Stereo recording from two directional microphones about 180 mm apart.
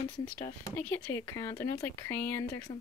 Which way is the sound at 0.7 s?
15° left (ahead or behind).